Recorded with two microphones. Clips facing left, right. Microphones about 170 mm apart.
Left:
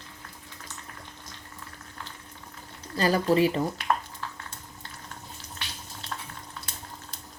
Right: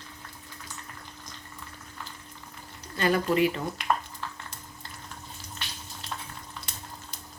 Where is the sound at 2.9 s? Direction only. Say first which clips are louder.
Left 2 dB; 35° left (ahead or behind).